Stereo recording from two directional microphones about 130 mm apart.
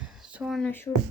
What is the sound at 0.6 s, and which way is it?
Speech, 15° left (ahead or behind).